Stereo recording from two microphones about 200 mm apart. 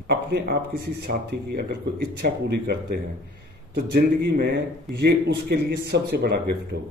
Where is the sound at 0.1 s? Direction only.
55° right (ahead or behind).